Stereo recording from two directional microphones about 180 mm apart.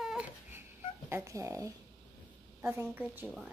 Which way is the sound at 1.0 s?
15° right (ahead or behind).